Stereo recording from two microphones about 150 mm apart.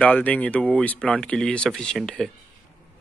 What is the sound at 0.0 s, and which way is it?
Speech, 10° left (ahead or behind).